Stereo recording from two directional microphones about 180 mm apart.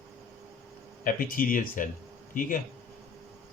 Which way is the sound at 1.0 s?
50° left (ahead or behind).